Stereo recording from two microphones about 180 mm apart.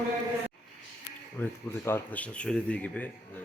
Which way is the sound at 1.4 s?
10° left (ahead or behind).